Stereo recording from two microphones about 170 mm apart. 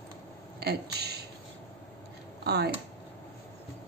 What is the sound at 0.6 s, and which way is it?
Speech, 70° right (ahead or behind).